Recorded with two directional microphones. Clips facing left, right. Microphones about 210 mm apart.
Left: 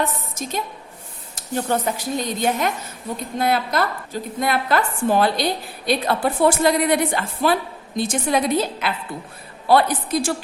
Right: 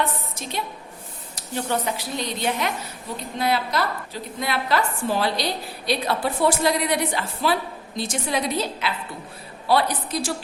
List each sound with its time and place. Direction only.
0.0 s a woman's voice: 45° left (ahead or behind)